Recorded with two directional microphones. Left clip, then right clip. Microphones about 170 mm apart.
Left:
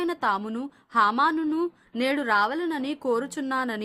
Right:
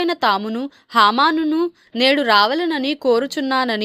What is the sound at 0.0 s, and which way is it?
Speech, 30° right (ahead or behind).